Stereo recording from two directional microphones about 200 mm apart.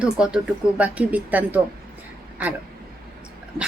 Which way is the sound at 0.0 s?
5° right (ahead or behind).